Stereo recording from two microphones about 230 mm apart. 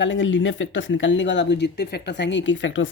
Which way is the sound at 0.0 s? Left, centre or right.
Left.